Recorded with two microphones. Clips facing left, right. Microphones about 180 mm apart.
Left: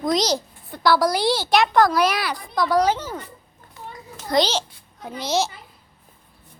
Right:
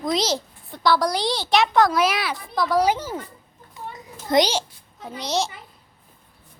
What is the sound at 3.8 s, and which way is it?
Children playing, 20° right (ahead or behind).